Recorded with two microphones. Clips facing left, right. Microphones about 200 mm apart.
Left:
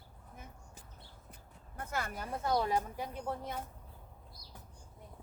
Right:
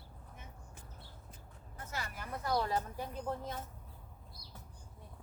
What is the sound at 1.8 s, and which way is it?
Speech, 50° left (ahead or behind).